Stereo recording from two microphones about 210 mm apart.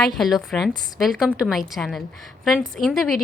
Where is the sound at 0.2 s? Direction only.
Centre (ahead or behind).